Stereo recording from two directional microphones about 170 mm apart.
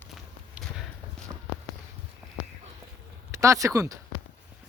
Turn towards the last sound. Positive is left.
turn(degrees=-20)  # may be behind; listen again after turning